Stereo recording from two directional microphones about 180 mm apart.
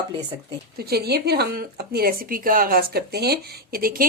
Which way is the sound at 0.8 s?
60° right (ahead or behind).